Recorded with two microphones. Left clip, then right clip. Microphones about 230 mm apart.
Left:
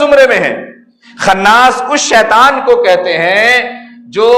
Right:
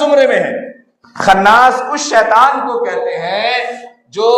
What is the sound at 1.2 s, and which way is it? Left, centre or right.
A man's voice, left.